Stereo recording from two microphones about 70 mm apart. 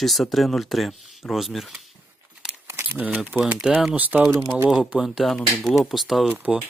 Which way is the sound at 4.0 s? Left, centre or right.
Right.